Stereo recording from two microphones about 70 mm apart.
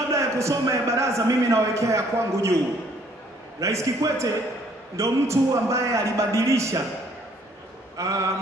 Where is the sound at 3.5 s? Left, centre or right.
Right.